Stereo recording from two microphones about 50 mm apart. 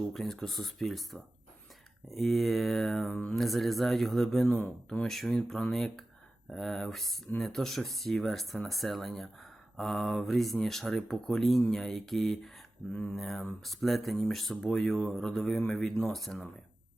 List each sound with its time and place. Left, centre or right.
0.1 s speech: centre
3.1 s speech: left
3.3 s speech: centre